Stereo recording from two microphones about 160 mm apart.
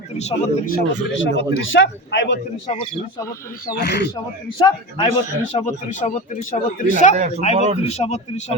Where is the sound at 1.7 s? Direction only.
90° left.